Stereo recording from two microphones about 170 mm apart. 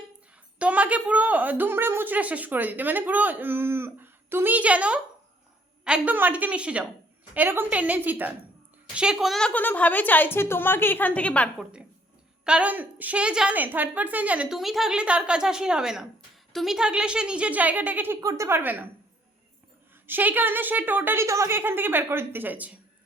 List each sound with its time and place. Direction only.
0.6 s a woman's voice: 10° right (ahead or behind); by 11.4 s 10° left (ahead or behind)
12.5 s speech: 10° right (ahead or behind)
20.1 s speech: 10° right (ahead or behind)